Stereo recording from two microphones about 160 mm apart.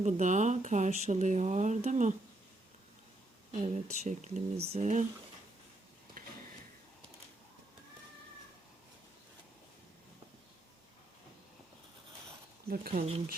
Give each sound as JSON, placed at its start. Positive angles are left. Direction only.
{"t": 0.0, "sound": "speech", "side_deg": -50}
{"t": 3.5, "sound": "speech", "side_deg": -45}
{"t": 12.6, "sound": "speech", "side_deg": -70}
{"t": 12.9, "sound": "speech", "side_deg": -40}